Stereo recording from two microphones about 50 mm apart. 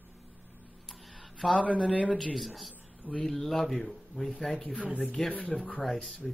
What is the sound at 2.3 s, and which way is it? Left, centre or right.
A woman's voice, centre.